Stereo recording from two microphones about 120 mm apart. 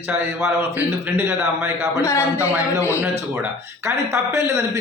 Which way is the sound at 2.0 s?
25° left (ahead or behind).